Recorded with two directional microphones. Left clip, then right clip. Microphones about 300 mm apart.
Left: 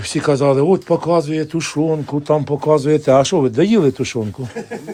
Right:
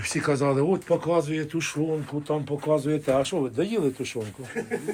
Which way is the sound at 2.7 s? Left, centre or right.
Left.